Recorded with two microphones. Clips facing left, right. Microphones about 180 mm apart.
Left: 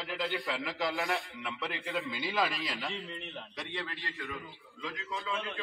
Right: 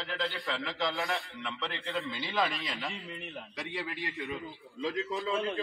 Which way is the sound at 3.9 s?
20° right (ahead or behind).